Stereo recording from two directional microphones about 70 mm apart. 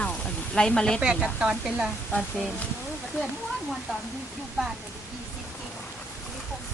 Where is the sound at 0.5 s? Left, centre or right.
Centre.